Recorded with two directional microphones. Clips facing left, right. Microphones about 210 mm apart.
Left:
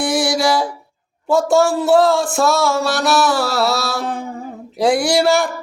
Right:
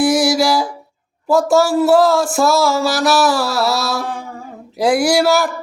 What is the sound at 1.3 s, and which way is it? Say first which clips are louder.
Mantra: right 1 dB; centre (ahead or behind).